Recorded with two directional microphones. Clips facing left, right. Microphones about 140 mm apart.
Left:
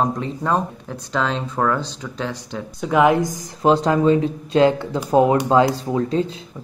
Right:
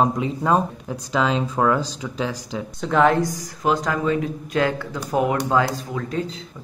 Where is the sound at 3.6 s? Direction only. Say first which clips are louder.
Left 6 dB; 30° left (ahead or behind).